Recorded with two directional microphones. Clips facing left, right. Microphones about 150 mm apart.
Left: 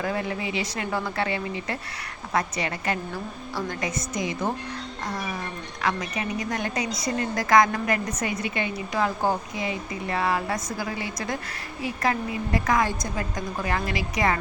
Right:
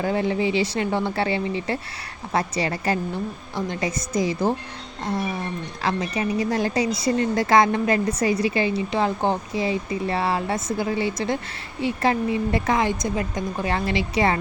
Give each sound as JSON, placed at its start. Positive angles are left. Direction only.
{"t": 0.0, "sound": "a woman's voice", "side_deg": -30}